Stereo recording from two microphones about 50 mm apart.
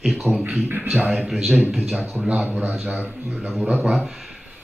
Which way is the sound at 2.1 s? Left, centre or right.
Right.